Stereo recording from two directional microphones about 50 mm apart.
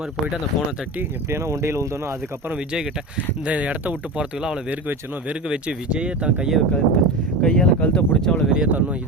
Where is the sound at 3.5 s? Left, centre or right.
Right.